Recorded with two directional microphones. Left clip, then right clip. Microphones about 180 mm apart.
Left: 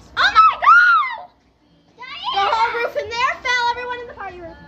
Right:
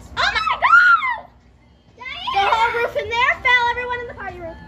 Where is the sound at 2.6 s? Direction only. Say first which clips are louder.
Right 1 dB; 30° left (ahead or behind).